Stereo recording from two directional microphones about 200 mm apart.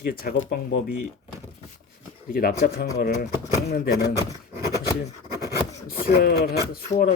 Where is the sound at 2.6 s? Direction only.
55° left (ahead or behind).